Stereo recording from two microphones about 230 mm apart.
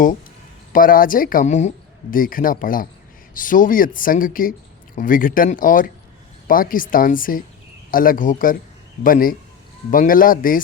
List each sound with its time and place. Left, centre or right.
0.7 s speech: left